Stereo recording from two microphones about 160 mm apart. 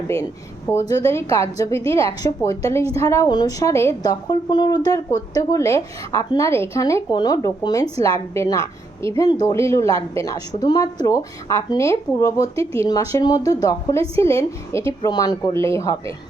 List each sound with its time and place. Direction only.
0.7 s a woman's voice: 20° left (ahead or behind)
15.0 s a woman's voice: 25° left (ahead or behind)